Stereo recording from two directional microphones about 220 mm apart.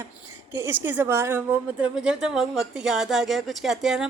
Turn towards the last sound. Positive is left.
turn(degrees=0)  # may be behind; listen again after turning